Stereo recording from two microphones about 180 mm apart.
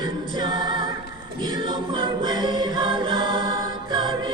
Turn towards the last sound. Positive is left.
turn(degrees=-25)  # may be behind; listen again after turning